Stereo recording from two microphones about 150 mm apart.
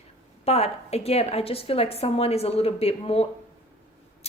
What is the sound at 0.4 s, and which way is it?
A woman's voice, 45° left (ahead or behind).